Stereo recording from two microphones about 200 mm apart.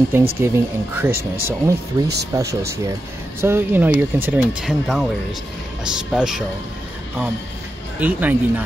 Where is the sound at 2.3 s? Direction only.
20° right (ahead or behind); by 6.4 s 5° right (ahead or behind).